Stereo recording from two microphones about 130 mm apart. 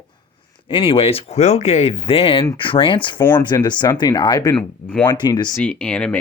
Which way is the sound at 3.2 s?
15° left (ahead or behind).